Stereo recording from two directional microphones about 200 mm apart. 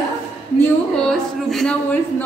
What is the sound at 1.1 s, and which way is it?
Speech, centre (ahead or behind).